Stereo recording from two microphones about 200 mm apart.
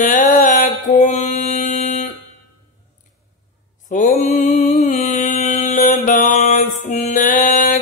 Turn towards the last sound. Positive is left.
turn(degrees=40)  # may be behind; listen again after turning